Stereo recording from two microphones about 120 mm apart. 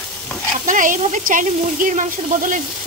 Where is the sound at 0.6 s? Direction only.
90° right.